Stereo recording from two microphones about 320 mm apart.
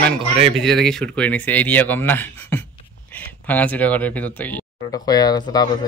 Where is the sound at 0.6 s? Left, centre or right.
Centre.